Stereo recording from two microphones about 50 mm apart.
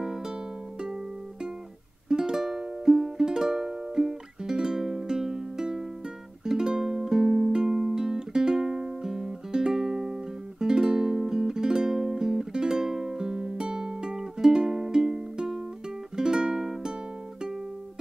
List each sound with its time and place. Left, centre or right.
0.0 s music: centre
2.0 s music: centre